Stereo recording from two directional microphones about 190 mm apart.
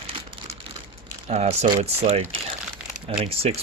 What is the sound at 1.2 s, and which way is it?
Speech, 35° right (ahead or behind).